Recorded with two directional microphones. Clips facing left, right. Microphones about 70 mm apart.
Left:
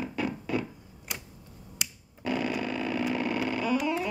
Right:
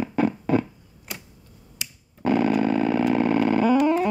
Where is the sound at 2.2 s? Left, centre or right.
Right.